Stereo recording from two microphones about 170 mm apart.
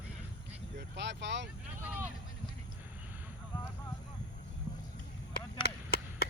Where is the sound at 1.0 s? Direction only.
90° right.